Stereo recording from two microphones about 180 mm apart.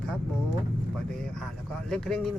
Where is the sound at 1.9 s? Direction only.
5° left (ahead or behind).